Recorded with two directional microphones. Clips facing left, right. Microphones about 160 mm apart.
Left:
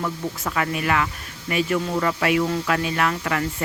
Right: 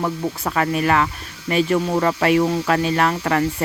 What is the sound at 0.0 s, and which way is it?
Speech, 40° right (ahead or behind).